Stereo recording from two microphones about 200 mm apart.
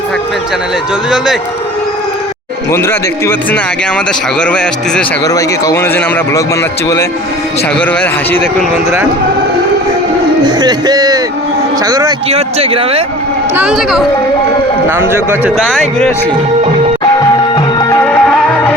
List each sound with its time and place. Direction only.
4.4 s a man's voice: 5° left (ahead or behind)
5.2 s a man's voice: 15° left (ahead or behind)
10.4 s a sound: 20° right (ahead or behind)
11.9 s speech: 20° right (ahead or behind)
12.3 s speech: 30° right (ahead or behind)
13.6 s a man's voice: 5° right (ahead or behind)
15.5 s a man's voice: centre (ahead or behind)
17.7 s music: 15° left (ahead or behind)